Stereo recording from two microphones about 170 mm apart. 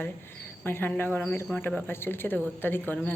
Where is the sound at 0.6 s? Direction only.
10° left (ahead or behind).